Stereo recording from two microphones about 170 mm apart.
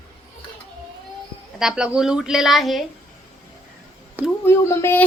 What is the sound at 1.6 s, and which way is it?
A woman's voice, 5° right (ahead or behind).